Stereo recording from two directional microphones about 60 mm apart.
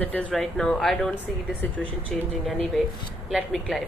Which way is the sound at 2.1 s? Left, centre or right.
Centre.